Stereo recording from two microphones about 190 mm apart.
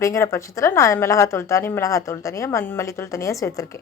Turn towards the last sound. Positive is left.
turn(degrees=15)  # may be behind; listen again after turning